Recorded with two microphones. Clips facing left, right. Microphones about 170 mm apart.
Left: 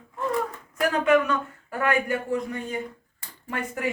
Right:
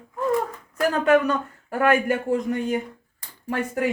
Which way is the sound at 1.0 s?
40° right (ahead or behind).